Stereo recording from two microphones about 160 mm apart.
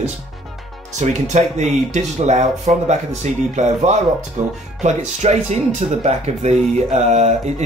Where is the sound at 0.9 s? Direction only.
45° right (ahead or behind).